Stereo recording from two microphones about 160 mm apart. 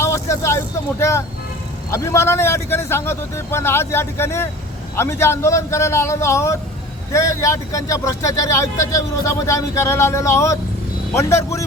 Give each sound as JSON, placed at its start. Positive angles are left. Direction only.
{"t": 0.0, "sound": "vehicle", "side_deg": 15}
{"t": 1.9, "sound": "a man's voice", "side_deg": 15}